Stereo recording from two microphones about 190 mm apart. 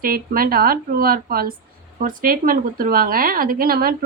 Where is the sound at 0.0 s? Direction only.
50° right (ahead or behind).